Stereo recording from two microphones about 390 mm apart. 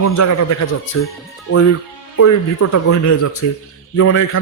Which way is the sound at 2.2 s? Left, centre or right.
Left.